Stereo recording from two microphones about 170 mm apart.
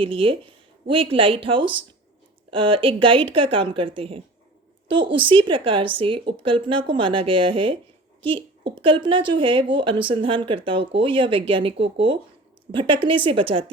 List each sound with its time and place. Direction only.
0.0 s a woman's voice: 30° right (ahead or behind)